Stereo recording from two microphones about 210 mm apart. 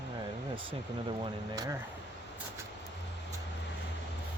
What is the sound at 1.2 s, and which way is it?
Speech, 15° right (ahead or behind).